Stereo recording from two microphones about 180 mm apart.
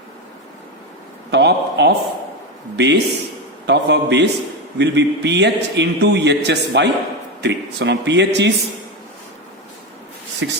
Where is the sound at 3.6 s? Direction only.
70° right (ahead or behind).